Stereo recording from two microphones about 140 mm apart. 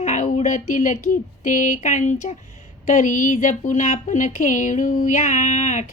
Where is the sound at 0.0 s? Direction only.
60° left (ahead or behind).